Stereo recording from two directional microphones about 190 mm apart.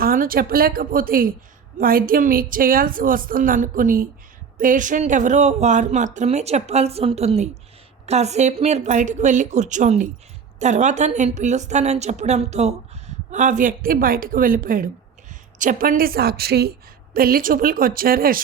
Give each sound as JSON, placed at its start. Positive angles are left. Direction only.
{"t": 0.0, "sound": "a woman's voice", "side_deg": -50}